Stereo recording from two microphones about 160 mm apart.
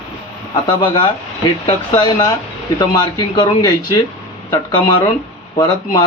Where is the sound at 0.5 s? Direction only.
25° left (ahead or behind).